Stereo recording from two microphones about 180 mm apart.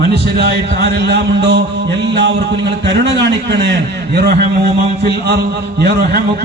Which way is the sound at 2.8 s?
75° right (ahead or behind).